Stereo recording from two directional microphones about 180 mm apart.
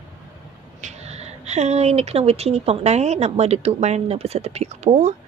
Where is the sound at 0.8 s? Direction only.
40° right (ahead or behind).